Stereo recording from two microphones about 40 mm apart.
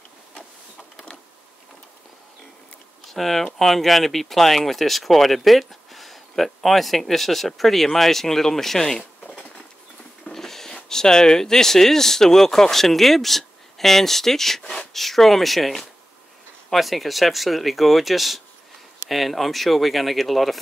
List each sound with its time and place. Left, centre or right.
3.1 s speech: centre
9.3 s patter: left
10.2 s speech: centre